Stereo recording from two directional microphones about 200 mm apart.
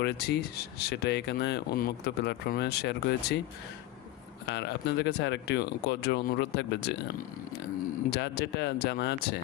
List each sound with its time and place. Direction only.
0.0 s speech: 55° left (ahead or behind)
4.4 s speech: 60° left (ahead or behind)
8.1 s speech: 55° left (ahead or behind)